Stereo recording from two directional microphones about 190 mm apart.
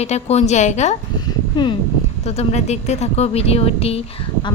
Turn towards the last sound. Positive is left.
turn(degrees=30)  # may be behind; listen again after turning